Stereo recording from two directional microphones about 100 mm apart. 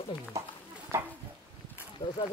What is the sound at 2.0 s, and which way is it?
Speech, 90° left.